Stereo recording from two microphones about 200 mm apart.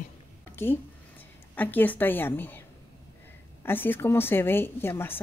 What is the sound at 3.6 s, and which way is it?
A woman's voice, 10° left (ahead or behind).